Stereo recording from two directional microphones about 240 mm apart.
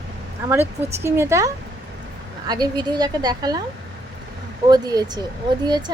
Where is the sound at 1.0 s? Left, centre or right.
Centre.